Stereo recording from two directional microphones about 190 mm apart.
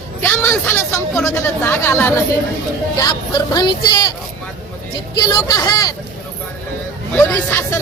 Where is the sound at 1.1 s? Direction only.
10° left (ahead or behind).